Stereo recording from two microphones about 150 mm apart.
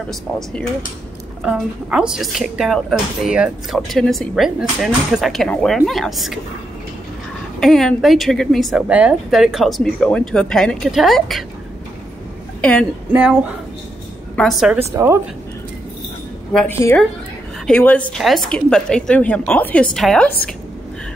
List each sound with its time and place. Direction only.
0.1 s speech: 5° left (ahead or behind)
7.6 s speech: centre (ahead or behind)
14.3 s a woman's voice: 5° left (ahead or behind)
14.9 s speech: 20° right (ahead or behind)
16.5 s a woman's voice: 15° left (ahead or behind)